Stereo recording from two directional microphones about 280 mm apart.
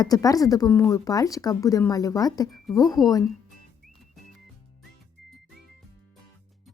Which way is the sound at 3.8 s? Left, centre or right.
Centre.